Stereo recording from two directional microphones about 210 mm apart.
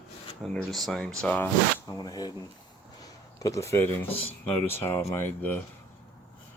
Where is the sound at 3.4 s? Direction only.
15° left (ahead or behind).